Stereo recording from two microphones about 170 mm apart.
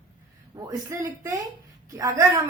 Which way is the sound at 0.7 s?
20° right (ahead or behind).